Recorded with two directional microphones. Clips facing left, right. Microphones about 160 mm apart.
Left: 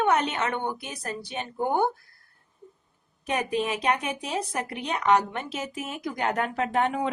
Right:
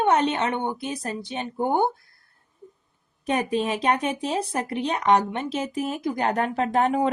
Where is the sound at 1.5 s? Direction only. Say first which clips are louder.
Right 2 dB; 20° right (ahead or behind).